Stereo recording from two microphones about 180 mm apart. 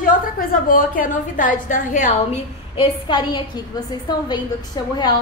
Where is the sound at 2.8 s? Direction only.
25° left (ahead or behind).